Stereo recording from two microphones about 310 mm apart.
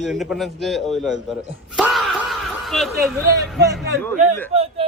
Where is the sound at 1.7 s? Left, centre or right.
Centre.